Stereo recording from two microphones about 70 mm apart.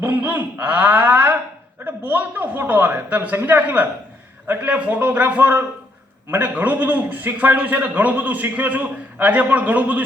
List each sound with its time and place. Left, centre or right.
0.0 s a man's voice: right